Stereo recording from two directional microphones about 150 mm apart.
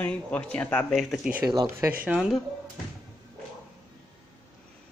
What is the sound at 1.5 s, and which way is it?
Speech, 25° right (ahead or behind).